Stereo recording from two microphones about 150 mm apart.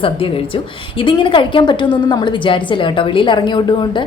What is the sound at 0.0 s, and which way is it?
A woman's voice, 35° left (ahead or behind).